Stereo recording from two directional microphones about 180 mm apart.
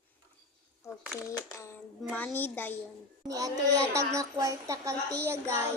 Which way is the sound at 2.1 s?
10° left (ahead or behind).